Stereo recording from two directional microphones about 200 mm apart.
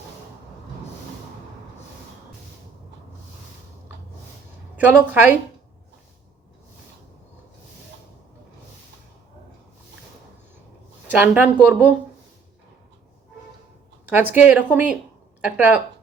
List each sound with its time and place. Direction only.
4.8 s a woman's voice: 10° right (ahead or behind)
11.2 s a woman's voice: 10° right (ahead or behind)
14.1 s a woman's voice: 10° right (ahead or behind)